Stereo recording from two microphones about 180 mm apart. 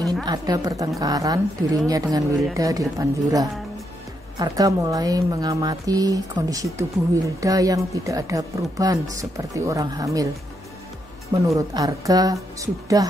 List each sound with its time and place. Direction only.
0.2 s a woman's voice: 20° right (ahead or behind)
11.4 s a woman's voice: 20° right (ahead or behind)